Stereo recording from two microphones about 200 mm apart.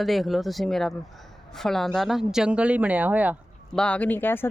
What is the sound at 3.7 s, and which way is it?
Speech, 5° left (ahead or behind).